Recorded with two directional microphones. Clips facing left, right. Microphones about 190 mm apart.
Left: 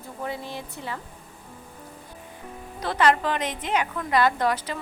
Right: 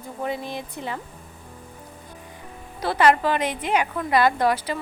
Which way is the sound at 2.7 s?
10° right (ahead or behind).